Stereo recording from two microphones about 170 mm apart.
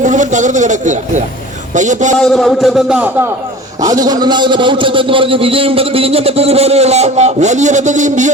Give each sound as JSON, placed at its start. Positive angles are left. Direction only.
{"t": 0.0, "sound": "speech", "side_deg": -45}
{"t": 2.1, "sound": "speech", "side_deg": 0}
{"t": 3.8, "sound": "a man's voice", "side_deg": -20}